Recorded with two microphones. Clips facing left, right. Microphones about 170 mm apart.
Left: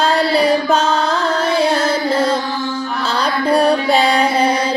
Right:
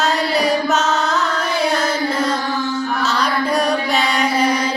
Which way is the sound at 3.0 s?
30° left (ahead or behind).